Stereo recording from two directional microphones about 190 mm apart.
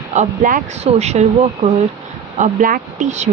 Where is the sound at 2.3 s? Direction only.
45° right (ahead or behind).